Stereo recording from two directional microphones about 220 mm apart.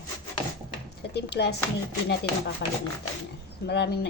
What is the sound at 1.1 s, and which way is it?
Speech, 50° left (ahead or behind).